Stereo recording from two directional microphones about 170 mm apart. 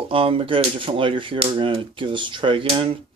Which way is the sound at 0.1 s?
30° right (ahead or behind).